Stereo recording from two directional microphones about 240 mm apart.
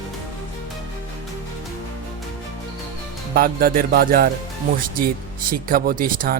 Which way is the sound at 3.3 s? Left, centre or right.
Right.